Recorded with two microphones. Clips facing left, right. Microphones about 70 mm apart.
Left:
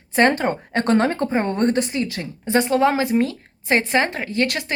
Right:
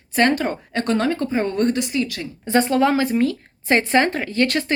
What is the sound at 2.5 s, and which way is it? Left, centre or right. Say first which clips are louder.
A woman's voice: even; centre.